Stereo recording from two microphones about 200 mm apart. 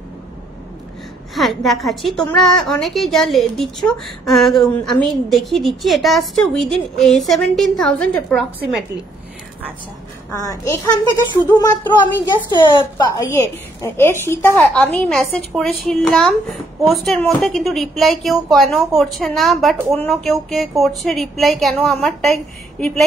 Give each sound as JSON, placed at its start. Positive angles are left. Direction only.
{"t": 1.3, "sound": "a woman's voice", "side_deg": 0}
{"t": 10.4, "sound": "a child's voice", "side_deg": 15}
{"t": 12.4, "sound": "a woman's voice", "side_deg": 25}